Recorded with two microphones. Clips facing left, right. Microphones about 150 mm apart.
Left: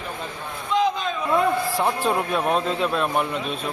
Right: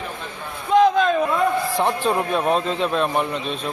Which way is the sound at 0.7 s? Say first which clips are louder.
Right 7 dB; 55° right (ahead or behind).